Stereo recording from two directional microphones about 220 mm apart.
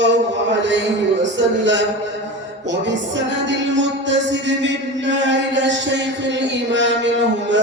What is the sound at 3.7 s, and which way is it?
Music, 55° right (ahead or behind).